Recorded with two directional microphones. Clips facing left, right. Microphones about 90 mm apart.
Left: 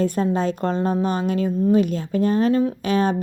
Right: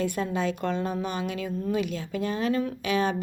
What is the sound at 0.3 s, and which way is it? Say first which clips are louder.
Speech: left 5 dB; 40° left (ahead or behind).